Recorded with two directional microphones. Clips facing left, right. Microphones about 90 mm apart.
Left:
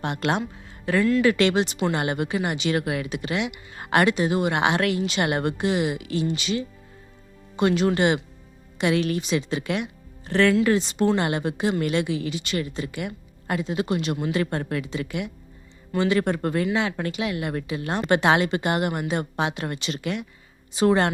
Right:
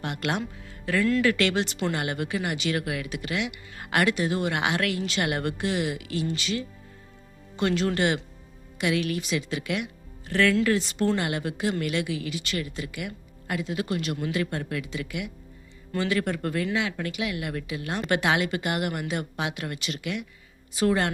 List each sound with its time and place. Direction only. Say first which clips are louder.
0.0 s speech: left 4 dB; 30° left (ahead or behind)
8.8 s speech: left 4 dB; 30° left (ahead or behind)
11.2 s speech: left 4 dB; 30° left (ahead or behind)
15.9 s a woman's voice: left 4 dB; 20° left (ahead or behind)